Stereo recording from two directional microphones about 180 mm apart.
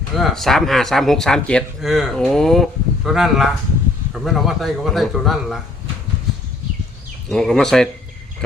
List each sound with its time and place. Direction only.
0.2 s a man's voice: centre (ahead or behind)
7.3 s a man's voice: centre (ahead or behind)